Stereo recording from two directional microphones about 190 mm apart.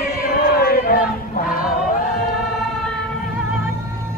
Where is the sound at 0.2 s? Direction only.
55° left (ahead or behind).